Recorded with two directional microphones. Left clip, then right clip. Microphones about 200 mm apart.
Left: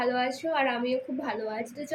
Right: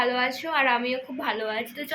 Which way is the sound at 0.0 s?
10° left (ahead or behind).